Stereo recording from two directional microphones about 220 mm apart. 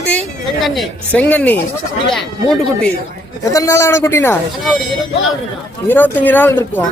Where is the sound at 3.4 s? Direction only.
15° left (ahead or behind).